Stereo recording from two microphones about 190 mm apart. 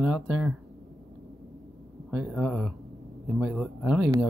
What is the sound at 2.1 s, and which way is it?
Speech, 5° right (ahead or behind).